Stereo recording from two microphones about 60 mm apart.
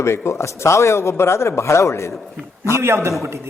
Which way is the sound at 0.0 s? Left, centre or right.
Left.